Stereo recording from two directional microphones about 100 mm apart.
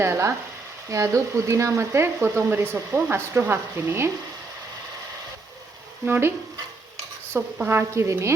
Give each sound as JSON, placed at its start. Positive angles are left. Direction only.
{"t": 0.0, "sound": "speech", "side_deg": -30}
{"t": 6.1, "sound": "speech", "side_deg": -25}
{"t": 7.3, "sound": "speech", "side_deg": -25}